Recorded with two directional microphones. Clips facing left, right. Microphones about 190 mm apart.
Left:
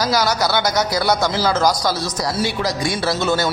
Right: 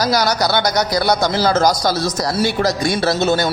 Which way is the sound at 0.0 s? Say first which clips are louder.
Right 2 dB; 35° right (ahead or behind).